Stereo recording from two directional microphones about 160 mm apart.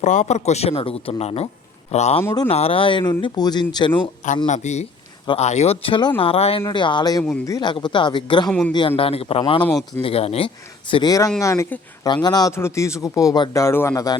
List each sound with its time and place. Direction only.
0.0 s a man's voice: 50° left (ahead or behind)
2.2 s speech: 20° left (ahead or behind)
2.5 s speech: 40° left (ahead or behind)
4.4 s a man's voice: 45° left (ahead or behind); by 8.4 s 30° left (ahead or behind)
8.4 s a man's voice: 5° left (ahead or behind)
9.0 s speech: 40° left (ahead or behind); by 14.2 s 20° left (ahead or behind)